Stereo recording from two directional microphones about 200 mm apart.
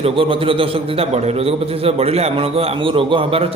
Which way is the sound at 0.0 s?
25° right (ahead or behind).